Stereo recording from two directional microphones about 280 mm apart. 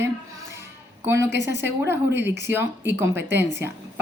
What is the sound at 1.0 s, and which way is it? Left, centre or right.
Speech, centre.